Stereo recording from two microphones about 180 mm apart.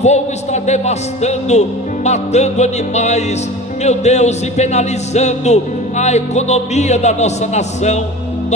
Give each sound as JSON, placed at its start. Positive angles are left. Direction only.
{"t": 0.0, "sound": "speech", "side_deg": 40}